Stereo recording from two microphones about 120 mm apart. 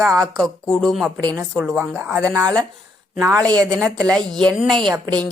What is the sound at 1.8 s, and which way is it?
Speech, 15° right (ahead or behind).